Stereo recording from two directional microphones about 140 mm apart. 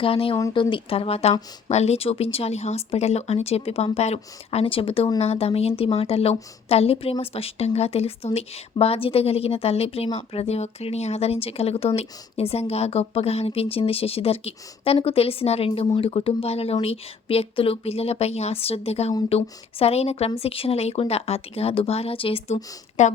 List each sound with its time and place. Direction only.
0.0 s a woman's voice: 40° left (ahead or behind)